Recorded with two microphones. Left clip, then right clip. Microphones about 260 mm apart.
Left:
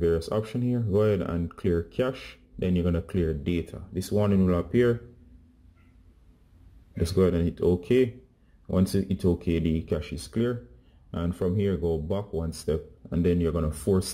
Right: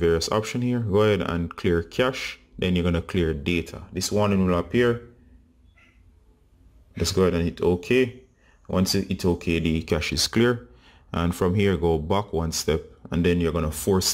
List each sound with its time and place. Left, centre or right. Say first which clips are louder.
0.0 s speech: right 4 dB; centre
7.0 s speech: right 2 dB; centre